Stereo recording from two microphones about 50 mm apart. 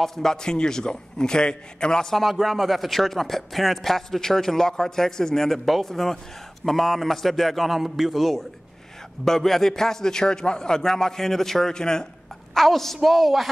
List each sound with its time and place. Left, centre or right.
0.0 s a man's voice: centre
9.2 s a man's voice: centre